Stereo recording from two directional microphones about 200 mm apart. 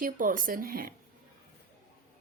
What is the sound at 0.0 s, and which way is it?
Speech, 45° right (ahead or behind).